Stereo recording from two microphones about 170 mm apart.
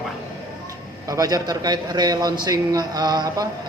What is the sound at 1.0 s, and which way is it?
A man's voice, 20° right (ahead or behind).